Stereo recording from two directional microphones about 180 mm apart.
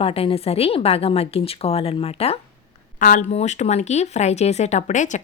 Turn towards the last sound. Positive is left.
turn(degrees=45)  # may be behind; listen again after turning